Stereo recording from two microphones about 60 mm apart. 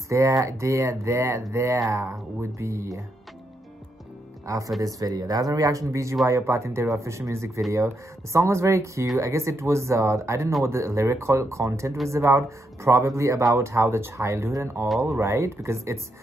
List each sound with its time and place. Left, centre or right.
0.1 s speech: right
4.5 s speech: right
4.8 s speech: right